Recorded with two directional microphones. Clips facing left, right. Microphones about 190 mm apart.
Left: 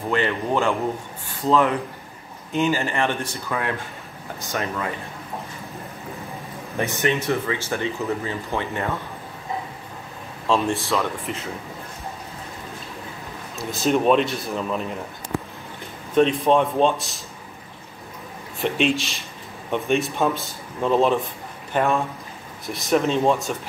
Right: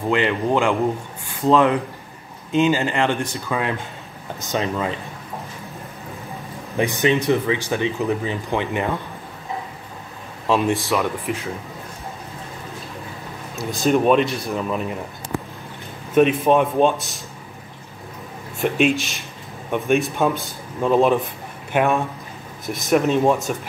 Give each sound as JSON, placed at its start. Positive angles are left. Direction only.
{"t": 0.1, "sound": "speech", "side_deg": -15}
{"t": 6.8, "sound": "speech", "side_deg": -15}
{"t": 10.4, "sound": "speech", "side_deg": -15}
{"t": 13.6, "sound": "speech", "side_deg": 0}
{"t": 16.2, "sound": "speech", "side_deg": -10}
{"t": 18.6, "sound": "speech", "side_deg": -5}
{"t": 21.7, "sound": "speech", "side_deg": -15}
{"t": 22.8, "sound": "speech", "side_deg": -5}